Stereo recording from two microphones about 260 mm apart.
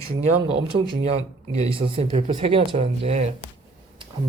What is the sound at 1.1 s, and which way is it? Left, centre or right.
Speech, right.